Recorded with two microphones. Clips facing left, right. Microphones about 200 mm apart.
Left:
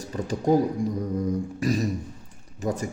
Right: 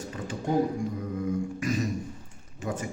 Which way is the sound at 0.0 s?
40° left (ahead or behind).